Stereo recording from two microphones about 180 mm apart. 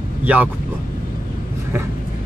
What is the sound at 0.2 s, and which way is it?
Speech, 10° right (ahead or behind).